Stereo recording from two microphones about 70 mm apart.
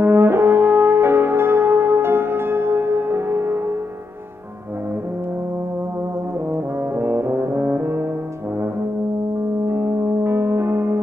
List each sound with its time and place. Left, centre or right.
0.0 s french horn: right
6.5 s brass instrument: right
9.7 s music: right